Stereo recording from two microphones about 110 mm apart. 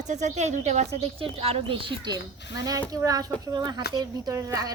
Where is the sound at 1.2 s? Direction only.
65° right (ahead or behind).